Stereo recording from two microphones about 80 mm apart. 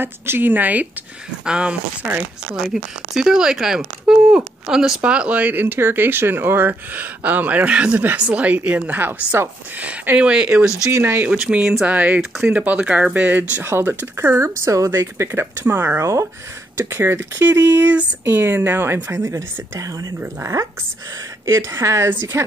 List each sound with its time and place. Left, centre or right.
0.0 s speech: right
10.9 s speech: right
11.2 s speech: centre; by 19.9 s right
21.5 s speech: right